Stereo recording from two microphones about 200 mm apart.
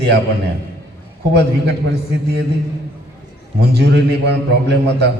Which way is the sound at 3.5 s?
55° right (ahead or behind).